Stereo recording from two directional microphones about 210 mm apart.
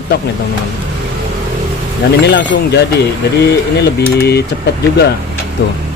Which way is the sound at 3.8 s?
50° left (ahead or behind).